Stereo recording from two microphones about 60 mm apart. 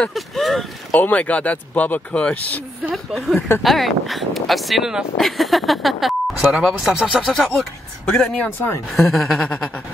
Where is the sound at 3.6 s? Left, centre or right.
Centre.